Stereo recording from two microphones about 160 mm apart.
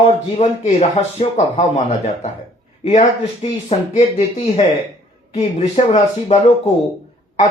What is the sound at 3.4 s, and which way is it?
Speech, 40° left (ahead or behind).